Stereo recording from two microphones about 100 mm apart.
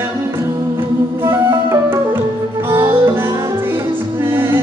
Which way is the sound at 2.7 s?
50° right (ahead or behind).